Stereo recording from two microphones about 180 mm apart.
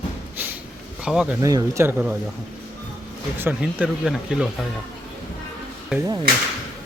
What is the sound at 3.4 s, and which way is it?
Speech, 10° right (ahead or behind).